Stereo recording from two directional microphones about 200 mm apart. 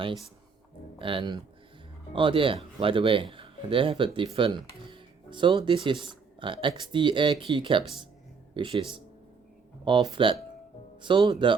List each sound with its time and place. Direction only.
0.9 s speech: 25° right (ahead or behind)